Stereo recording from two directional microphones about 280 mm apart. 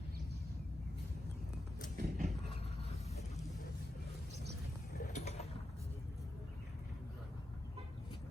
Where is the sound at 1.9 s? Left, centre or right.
Right.